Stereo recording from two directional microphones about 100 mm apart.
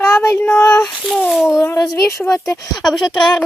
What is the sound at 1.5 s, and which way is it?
Speech, 30° left (ahead or behind).